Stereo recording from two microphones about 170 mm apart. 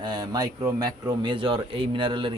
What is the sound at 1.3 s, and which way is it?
Speech, 30° right (ahead or behind).